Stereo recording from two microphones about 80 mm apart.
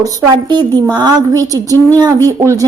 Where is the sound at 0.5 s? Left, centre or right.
Right.